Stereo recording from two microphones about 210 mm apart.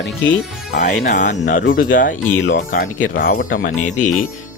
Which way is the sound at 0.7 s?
35° left (ahead or behind).